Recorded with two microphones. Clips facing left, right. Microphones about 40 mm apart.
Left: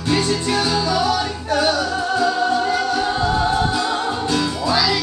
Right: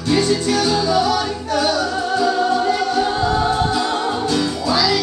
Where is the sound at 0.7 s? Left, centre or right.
Centre.